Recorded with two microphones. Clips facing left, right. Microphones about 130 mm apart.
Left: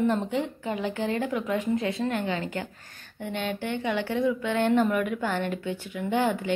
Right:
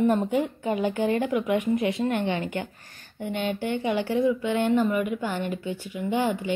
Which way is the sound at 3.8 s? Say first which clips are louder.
Right 2 dB; 15° right (ahead or behind).